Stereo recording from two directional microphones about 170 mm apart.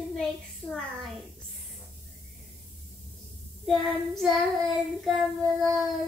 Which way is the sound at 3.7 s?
Centre (ahead or behind).